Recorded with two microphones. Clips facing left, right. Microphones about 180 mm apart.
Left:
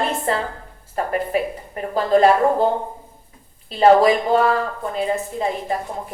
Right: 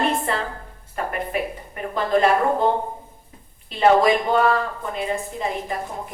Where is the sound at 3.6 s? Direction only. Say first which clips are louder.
Left 3 dB; 35° left (ahead or behind).